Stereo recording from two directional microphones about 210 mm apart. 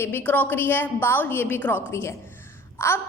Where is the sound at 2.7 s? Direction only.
10° left (ahead or behind).